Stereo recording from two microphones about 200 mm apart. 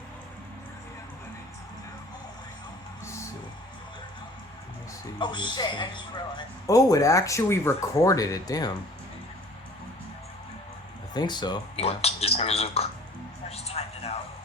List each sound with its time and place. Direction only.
5.2 s a woman's voice: 25° left (ahead or behind)
11.1 s speech: 20° left (ahead or behind)
13.5 s music: 30° left (ahead or behind)